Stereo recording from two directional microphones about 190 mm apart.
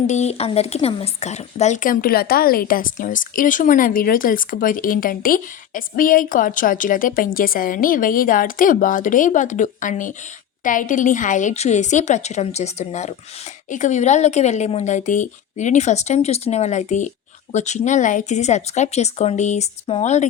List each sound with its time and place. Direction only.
0.1 s a woman's voice: 35° left (ahead or behind)